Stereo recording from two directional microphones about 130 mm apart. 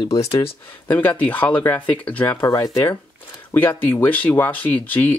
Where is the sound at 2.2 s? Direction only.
25° left (ahead or behind).